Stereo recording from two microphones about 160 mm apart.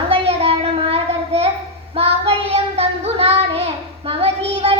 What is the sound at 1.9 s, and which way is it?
Child singing, 35° right (ahead or behind).